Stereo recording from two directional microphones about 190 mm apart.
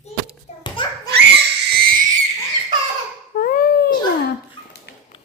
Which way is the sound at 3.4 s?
50° left (ahead or behind).